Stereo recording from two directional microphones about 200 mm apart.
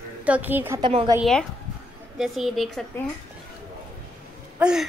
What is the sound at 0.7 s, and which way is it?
Speech, 25° right (ahead or behind).